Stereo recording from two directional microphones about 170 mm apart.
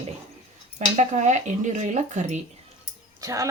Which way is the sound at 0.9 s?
45° right (ahead or behind).